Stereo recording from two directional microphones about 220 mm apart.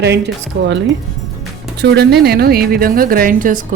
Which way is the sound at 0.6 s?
60° right (ahead or behind).